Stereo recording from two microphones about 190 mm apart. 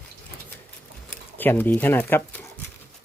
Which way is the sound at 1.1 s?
10° left (ahead or behind).